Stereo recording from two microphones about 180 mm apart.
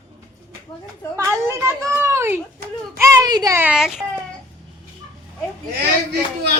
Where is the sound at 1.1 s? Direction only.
15° right (ahead or behind).